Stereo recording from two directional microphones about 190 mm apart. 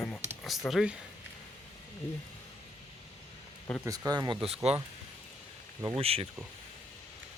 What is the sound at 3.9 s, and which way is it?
Speech, 20° right (ahead or behind).